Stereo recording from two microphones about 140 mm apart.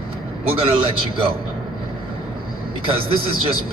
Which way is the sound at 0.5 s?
40° right (ahead or behind).